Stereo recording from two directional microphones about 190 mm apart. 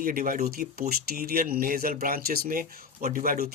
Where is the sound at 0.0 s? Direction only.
50° right (ahead or behind).